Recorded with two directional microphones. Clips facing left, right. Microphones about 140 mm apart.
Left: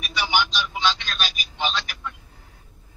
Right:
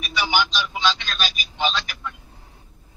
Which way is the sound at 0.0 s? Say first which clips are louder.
Right 1 dB; 90° right.